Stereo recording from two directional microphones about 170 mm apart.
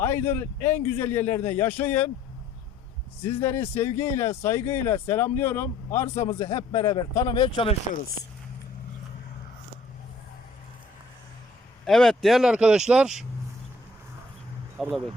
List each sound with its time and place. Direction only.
0.0 s a man's voice: 15° left (ahead or behind)
3.2 s a man's voice: 15° left (ahead or behind); by 7.8 s 30° left (ahead or behind)
11.9 s speech: centre (ahead or behind)
14.8 s speech: centre (ahead or behind)